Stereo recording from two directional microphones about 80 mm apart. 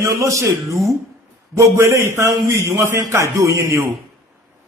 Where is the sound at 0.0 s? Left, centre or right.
Right.